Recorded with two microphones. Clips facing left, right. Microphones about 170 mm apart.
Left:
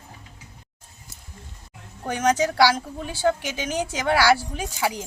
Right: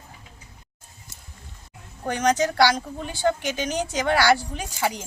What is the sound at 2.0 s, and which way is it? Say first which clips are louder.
A woman's voice: even; 10° left (ahead or behind).